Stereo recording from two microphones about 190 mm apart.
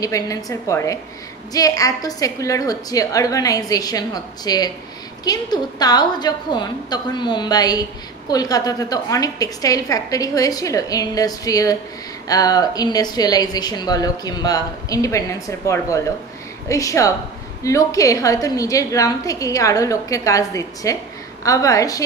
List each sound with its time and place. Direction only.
0.0 s a woman's voice: 15° left (ahead or behind)